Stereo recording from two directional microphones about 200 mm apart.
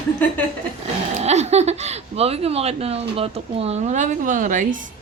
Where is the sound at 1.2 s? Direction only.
35° right (ahead or behind).